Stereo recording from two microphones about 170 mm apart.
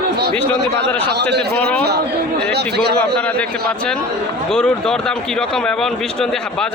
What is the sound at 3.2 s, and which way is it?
Speech, 10° left (ahead or behind).